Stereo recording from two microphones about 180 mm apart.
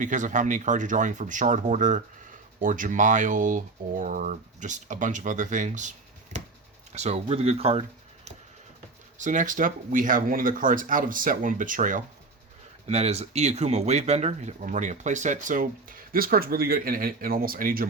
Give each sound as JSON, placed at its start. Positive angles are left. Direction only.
{"t": 0.0, "sound": "speech", "side_deg": -45}
{"t": 6.3, "sound": "a sound", "side_deg": -40}
{"t": 6.9, "sound": "speech", "side_deg": -35}